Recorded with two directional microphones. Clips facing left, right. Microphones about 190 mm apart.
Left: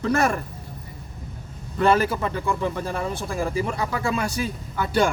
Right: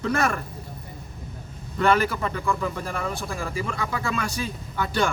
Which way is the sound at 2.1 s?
25° left (ahead or behind).